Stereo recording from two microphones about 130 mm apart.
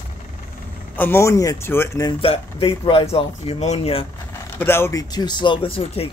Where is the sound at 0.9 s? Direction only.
15° left (ahead or behind).